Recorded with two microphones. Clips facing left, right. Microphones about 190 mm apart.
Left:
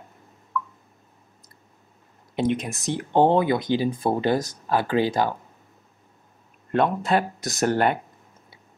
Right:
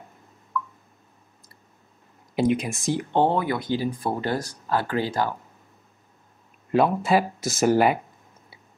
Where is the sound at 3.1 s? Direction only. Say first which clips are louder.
Left 5 dB; 20° left (ahead or behind).